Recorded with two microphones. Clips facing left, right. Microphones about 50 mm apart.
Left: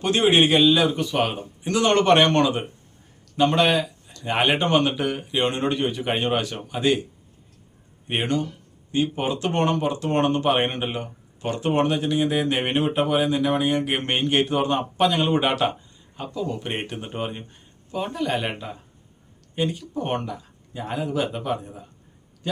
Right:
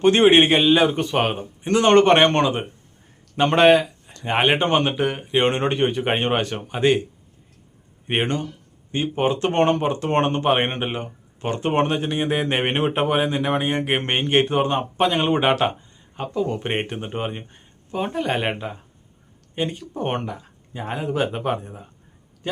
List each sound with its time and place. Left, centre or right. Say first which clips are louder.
0.0 s speech: right 4 dB; right
3.3 s speech: right 4 dB; right
5.4 s speech: right 4 dB; right
8.0 s speech: right 1 dB; right
16.3 s speech: right 4 dB; right